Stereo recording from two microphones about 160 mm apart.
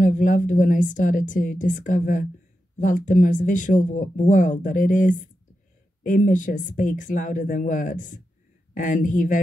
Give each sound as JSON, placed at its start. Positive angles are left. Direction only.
{"t": 0.0, "sound": "speech", "side_deg": 55}